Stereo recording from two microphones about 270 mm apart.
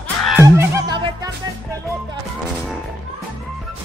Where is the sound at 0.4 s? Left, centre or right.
Centre.